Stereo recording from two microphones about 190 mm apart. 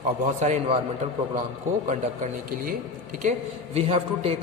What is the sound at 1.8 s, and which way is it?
Speech, 40° right (ahead or behind).